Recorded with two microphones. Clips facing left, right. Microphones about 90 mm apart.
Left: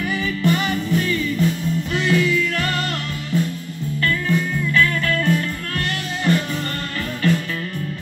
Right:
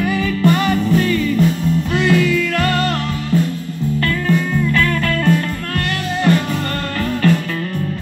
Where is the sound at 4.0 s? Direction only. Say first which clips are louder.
Right 2 dB; 40° right (ahead or behind).